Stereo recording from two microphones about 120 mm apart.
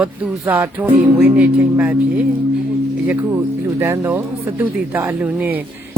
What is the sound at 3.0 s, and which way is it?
Speech, 15° right (ahead or behind).